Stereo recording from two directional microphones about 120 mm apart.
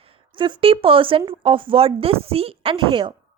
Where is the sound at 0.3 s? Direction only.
40° right (ahead or behind).